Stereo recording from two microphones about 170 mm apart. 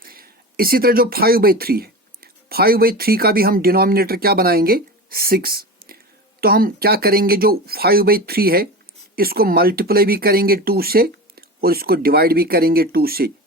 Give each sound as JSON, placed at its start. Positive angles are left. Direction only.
{"t": 0.0, "sound": "speech", "side_deg": -60}